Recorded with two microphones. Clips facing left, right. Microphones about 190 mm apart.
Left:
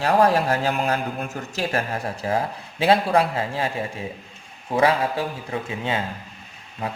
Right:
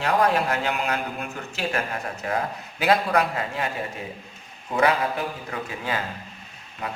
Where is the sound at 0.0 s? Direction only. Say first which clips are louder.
Left 3 dB; 35° left (ahead or behind).